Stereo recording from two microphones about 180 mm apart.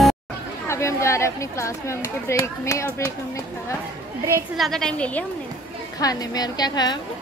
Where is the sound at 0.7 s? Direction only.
15° left (ahead or behind).